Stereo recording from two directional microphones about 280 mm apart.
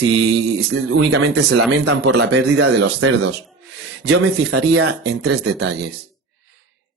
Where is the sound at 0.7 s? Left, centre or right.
Right.